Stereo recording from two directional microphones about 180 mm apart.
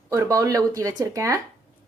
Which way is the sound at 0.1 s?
15° right (ahead or behind).